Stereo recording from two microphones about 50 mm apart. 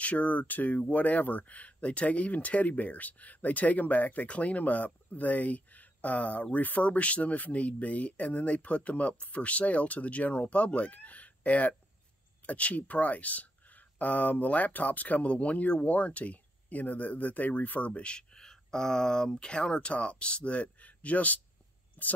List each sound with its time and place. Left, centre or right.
0.0 s speech: left
22.0 s speech: left